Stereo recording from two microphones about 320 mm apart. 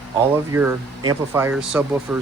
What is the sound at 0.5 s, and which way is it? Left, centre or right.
Speech, centre.